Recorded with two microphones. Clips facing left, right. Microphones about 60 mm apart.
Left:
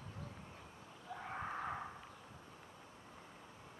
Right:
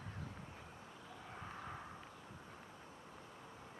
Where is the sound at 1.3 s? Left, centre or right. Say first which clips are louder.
Left 8 dB; left.